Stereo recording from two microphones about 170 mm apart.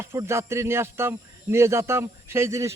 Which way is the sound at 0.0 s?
15° right (ahead or behind).